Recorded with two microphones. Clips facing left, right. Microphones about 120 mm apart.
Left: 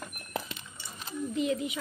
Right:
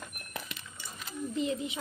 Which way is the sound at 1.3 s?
30° right (ahead or behind).